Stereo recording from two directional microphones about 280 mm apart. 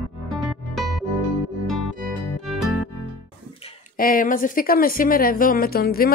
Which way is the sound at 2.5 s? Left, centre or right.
Centre.